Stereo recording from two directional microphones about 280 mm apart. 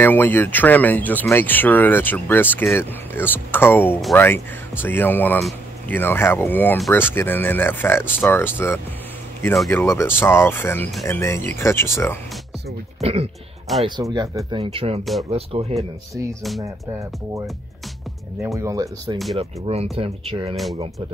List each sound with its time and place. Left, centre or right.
0.0 s speech: centre
13.0 s speech: right
18.4 s speech: centre